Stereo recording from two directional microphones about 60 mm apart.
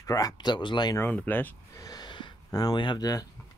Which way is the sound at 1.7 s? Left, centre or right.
Left.